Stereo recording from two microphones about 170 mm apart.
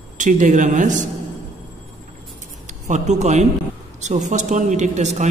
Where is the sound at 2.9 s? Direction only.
45° right (ahead or behind).